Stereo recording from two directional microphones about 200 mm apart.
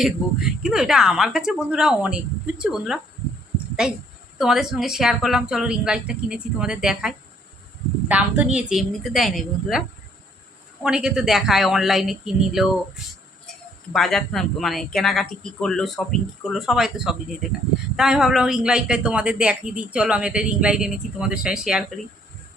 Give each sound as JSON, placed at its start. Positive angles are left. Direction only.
{"t": 0.0, "sound": "a woman's voice", "side_deg": 0}
{"t": 10.8, "sound": "a woman's voice", "side_deg": -5}
{"t": 13.9, "sound": "a woman's voice", "side_deg": 0}